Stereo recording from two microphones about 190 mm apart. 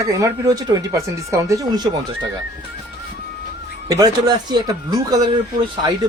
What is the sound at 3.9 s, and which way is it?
Speech, 20° right (ahead or behind).